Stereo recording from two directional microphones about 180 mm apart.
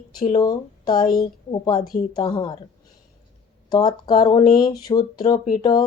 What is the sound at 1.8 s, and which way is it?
Speech, 55° left (ahead or behind).